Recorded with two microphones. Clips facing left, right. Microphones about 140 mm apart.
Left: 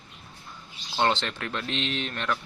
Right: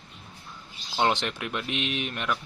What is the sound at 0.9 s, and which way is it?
Speech, 10° right (ahead or behind).